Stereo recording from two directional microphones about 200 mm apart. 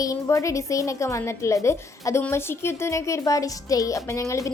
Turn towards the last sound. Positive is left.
turn(degrees=15)  # may be behind; listen again after turning